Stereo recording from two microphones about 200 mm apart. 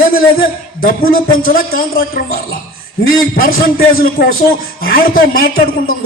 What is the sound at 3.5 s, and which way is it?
A man's voice, 50° left (ahead or behind).